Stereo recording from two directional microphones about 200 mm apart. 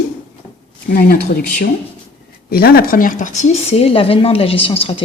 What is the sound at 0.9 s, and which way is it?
A woman's voice, 45° left (ahead or behind).